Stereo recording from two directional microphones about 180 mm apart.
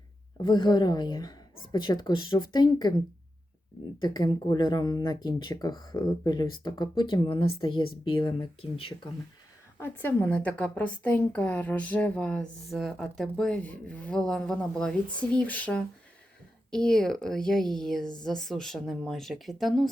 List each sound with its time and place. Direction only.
0.4 s speech: 25° left (ahead or behind)
4.0 s speech: 20° left (ahead or behind)
9.7 s a woman's voice: 10° left (ahead or behind)